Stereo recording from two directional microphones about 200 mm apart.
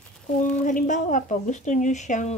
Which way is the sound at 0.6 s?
40° left (ahead or behind).